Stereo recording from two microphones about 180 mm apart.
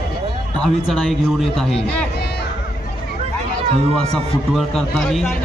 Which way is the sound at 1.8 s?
65° left (ahead or behind).